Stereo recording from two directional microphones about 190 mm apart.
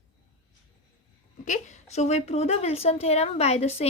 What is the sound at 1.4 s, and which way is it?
A woman's voice, 40° left (ahead or behind).